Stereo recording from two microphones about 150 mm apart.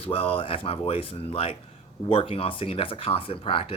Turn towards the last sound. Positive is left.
turn(degrees=40)  # may be behind; listen again after turning